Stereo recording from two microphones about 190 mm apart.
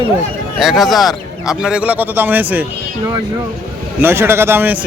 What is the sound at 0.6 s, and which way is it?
A man's voice, centre (ahead or behind).